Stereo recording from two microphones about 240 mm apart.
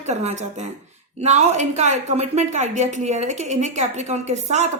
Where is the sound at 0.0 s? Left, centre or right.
Right.